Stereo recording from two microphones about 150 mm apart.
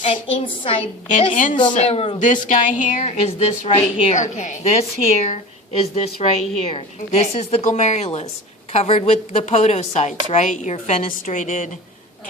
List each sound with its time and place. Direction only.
0.0 s a woman's voice: 40° left (ahead or behind)
1.2 s a woman's voice: 55° left (ahead or behind); by 2.2 s 35° left (ahead or behind)
2.2 s a woman's voice: 60° left (ahead or behind)